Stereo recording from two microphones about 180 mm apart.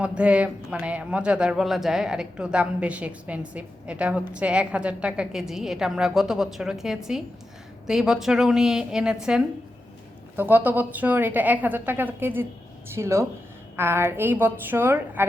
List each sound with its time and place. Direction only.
0.0 s a man's voice: 5° right (ahead or behind)
10.3 s a woman's voice: 10° right (ahead or behind)